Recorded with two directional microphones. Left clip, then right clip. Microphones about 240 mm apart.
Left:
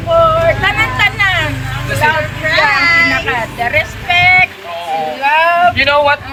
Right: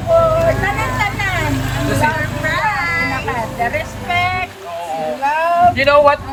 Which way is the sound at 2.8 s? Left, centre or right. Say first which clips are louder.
Left 8 dB; left.